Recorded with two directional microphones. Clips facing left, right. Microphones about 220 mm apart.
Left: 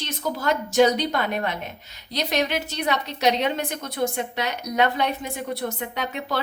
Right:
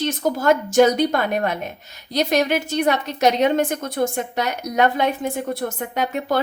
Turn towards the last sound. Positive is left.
turn(degrees=-45)  # may be behind; listen again after turning